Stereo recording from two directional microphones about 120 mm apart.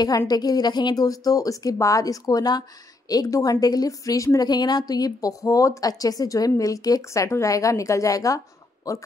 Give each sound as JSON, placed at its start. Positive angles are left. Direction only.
{"t": 0.3, "sound": "a woman's voice", "side_deg": 35}